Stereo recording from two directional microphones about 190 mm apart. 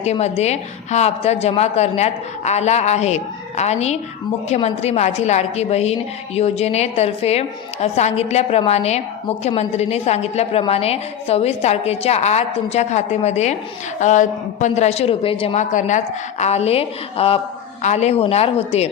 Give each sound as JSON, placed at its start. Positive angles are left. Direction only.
{"t": 0.0, "sound": "a woman's voice", "side_deg": 35}